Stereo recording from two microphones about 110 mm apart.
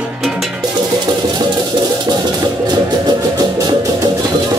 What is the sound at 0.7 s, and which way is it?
Music, 40° right (ahead or behind).